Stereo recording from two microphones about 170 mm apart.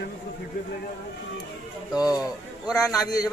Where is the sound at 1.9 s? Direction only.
20° left (ahead or behind).